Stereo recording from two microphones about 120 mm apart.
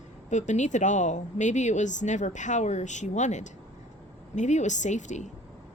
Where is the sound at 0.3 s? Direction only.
80° left.